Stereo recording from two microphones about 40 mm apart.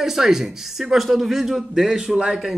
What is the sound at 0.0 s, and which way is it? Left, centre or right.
Speech, centre.